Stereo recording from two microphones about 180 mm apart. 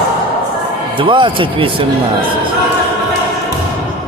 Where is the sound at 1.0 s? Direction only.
25° right (ahead or behind).